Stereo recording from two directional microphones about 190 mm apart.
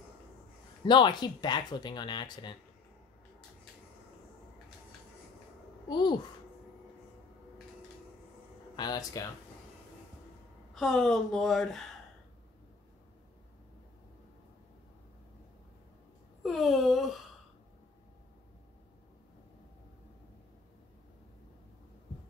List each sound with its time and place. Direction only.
0.8 s speech: 25° left (ahead or behind)
5.9 s speech: 20° left (ahead or behind)
8.7 s speech: 20° left (ahead or behind)
10.7 s a woman's voice: centre (ahead or behind)
16.4 s speech: centre (ahead or behind)